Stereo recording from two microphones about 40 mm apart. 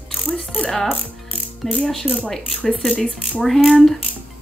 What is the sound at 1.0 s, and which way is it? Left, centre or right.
Mechanisms, centre.